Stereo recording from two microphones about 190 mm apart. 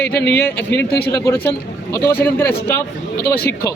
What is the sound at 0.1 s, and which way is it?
Speech, 60° left (ahead or behind).